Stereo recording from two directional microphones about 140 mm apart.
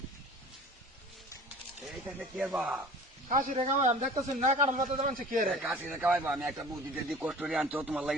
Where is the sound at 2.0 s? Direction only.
10° right (ahead or behind).